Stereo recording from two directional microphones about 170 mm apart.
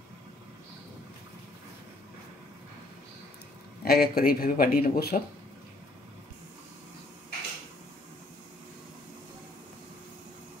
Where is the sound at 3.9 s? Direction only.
60° left (ahead or behind).